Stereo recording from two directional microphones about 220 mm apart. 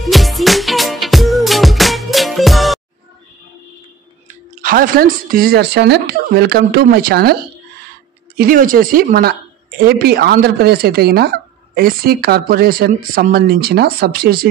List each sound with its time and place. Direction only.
0.0 s music: centre (ahead or behind)
4.6 s speech: 40° right (ahead or behind)
8.4 s speech: 40° right (ahead or behind)